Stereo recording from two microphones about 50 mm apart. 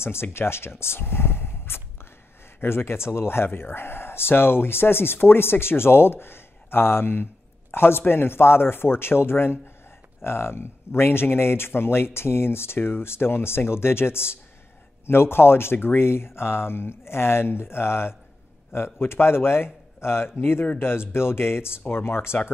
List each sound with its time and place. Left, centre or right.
0.0 s speech: left